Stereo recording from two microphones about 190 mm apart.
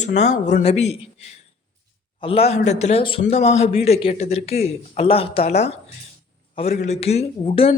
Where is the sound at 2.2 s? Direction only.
30° left (ahead or behind).